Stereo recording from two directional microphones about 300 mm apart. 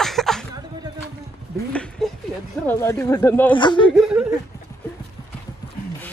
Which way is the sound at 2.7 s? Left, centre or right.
Centre.